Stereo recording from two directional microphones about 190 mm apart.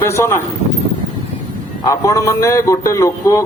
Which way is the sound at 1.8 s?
15° left (ahead or behind).